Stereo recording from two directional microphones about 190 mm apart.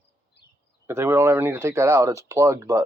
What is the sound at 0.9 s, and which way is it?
Speech, 15° right (ahead or behind).